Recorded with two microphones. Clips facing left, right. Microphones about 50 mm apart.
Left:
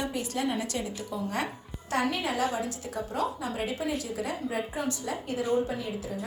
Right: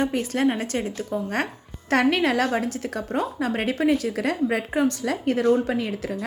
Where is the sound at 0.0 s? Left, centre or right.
Right.